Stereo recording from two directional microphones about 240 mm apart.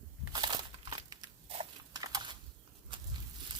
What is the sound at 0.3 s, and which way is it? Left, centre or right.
Crumpling, centre.